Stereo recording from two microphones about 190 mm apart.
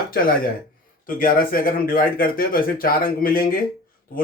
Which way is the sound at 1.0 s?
50° left (ahead or behind).